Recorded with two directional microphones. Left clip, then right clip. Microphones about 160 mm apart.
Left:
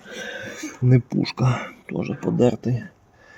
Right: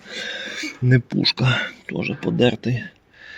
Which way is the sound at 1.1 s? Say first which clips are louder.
Right 5 dB; 15° right (ahead or behind).